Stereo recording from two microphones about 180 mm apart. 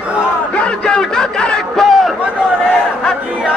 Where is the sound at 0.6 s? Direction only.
5° left (ahead or behind).